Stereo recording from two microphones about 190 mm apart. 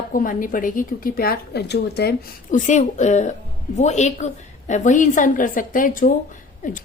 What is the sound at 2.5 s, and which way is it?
A woman's voice, 40° left (ahead or behind).